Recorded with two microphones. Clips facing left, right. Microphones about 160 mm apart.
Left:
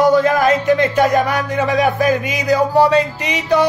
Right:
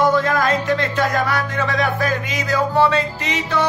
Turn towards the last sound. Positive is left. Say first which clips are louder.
# left 5 dB
turn(degrees=15)  # may be behind; listen again after turning